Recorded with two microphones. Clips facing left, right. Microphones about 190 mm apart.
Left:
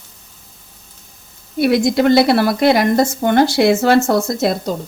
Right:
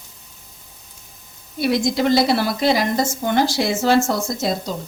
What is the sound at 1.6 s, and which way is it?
Speech, 60° left (ahead or behind).